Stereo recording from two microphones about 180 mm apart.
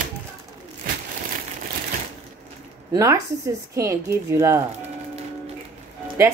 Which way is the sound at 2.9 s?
15° right (ahead or behind).